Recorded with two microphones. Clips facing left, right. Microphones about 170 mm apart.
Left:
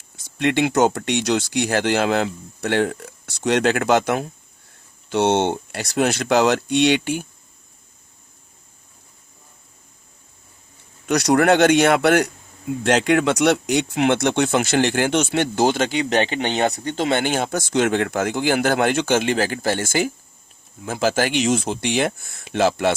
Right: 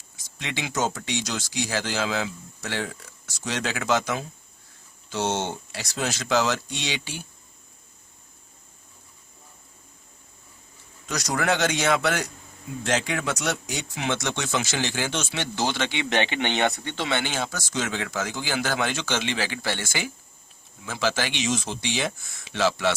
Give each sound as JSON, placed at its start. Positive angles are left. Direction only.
{"t": 0.2, "sound": "speech", "side_deg": 60}
{"t": 11.0, "sound": "speech", "side_deg": 65}